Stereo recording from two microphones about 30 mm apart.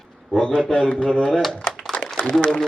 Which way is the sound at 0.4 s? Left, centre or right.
Left.